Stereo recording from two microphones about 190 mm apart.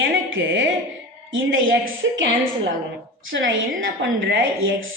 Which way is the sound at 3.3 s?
80° right.